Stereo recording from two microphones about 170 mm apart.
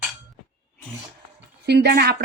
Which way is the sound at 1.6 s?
75° right (ahead or behind).